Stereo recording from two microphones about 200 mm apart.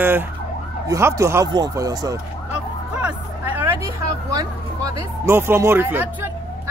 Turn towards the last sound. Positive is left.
turn(degrees=-10)  # may be behind; listen again after turning